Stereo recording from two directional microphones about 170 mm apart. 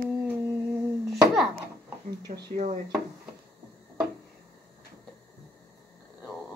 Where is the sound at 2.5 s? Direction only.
45° right (ahead or behind).